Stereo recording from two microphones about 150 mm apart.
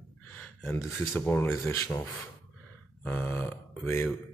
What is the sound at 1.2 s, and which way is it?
Speech, 10° left (ahead or behind).